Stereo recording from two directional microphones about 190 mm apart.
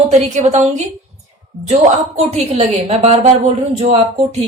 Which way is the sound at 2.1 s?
35° right (ahead or behind).